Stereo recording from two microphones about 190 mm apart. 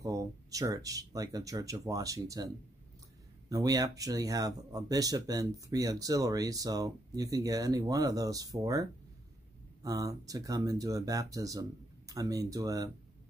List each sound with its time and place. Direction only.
0.0 s speech: 20° right (ahead or behind)
9.8 s speech: 20° right (ahead or behind)